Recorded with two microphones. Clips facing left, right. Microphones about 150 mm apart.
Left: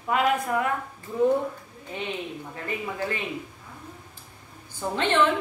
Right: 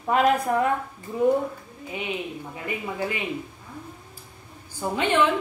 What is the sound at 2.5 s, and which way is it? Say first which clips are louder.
Speech: right 1 dB; 15° right (ahead or behind).